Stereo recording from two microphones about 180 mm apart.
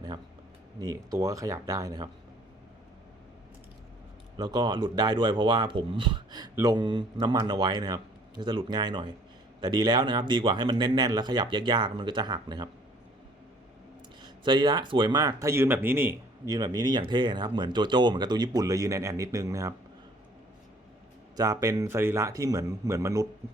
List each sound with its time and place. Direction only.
0.8 s speech: 20° right (ahead or behind)
4.4 s speech: 25° right (ahead or behind)
14.2 s speech: 25° right (ahead or behind)
21.3 s speech: 20° right (ahead or behind)